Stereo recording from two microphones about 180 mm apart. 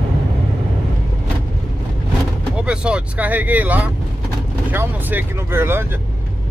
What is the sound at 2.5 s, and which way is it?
Speech, 5° right (ahead or behind).